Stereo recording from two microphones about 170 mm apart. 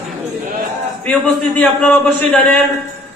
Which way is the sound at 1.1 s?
5° left (ahead or behind).